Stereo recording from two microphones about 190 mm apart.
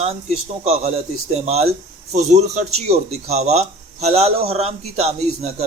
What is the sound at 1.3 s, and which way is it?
Speech, 35° right (ahead or behind).